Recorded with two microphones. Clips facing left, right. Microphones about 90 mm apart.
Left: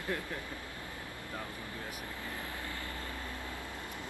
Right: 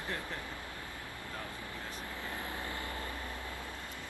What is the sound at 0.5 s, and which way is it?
Vehicle, 20° left (ahead or behind).